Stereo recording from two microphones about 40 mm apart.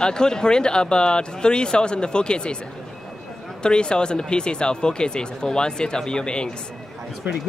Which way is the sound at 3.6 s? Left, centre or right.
Left.